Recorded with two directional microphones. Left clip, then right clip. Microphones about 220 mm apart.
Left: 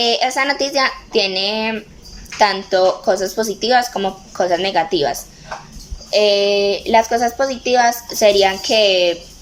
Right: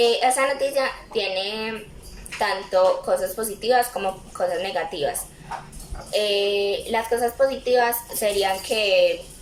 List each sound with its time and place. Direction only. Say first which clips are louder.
0.0 s speech: left 3 dB; 45° left (ahead or behind)